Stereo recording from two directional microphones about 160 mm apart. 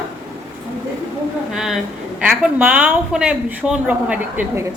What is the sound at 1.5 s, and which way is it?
A woman's voice, centre (ahead or behind).